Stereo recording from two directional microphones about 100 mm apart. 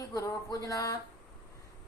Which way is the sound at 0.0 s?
35° left (ahead or behind).